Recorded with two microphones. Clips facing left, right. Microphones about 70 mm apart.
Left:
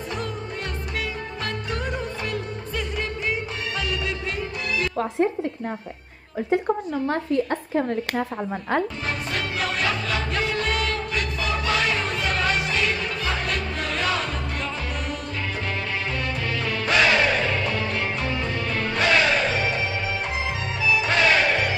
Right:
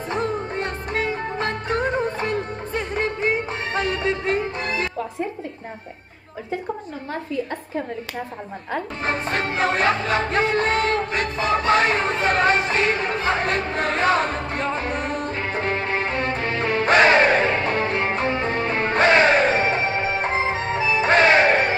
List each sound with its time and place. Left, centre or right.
0.1 s music of bollywood: right
7.1 s a woman's voice: left
9.0 s music: right